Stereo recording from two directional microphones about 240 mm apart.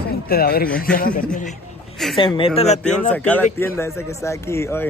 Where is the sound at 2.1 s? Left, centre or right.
Left.